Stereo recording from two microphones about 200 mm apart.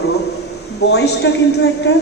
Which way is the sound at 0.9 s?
60° left (ahead or behind).